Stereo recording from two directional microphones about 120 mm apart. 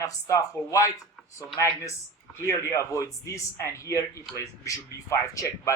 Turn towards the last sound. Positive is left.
turn(degrees=25)  # may be behind; listen again after turning